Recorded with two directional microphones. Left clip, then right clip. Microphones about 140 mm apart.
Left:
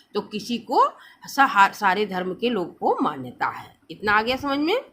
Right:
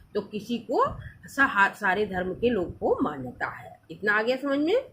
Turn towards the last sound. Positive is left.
turn(degrees=45)  # may be behind; listen again after turning